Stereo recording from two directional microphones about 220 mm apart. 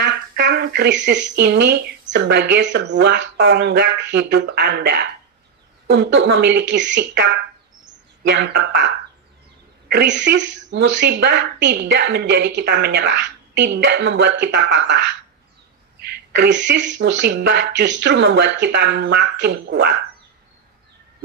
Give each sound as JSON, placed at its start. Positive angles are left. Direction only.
{"t": 0.5, "sound": "speech", "side_deg": -50}
{"t": 8.3, "sound": "speech", "side_deg": -50}
{"t": 9.9, "sound": "speech", "side_deg": -55}
{"t": 16.0, "sound": "speech", "side_deg": -45}